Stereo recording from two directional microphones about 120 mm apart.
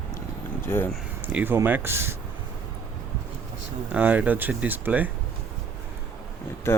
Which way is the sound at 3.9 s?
10° right (ahead or behind).